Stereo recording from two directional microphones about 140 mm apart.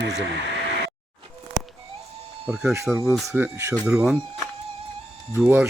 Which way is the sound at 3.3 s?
15° right (ahead or behind).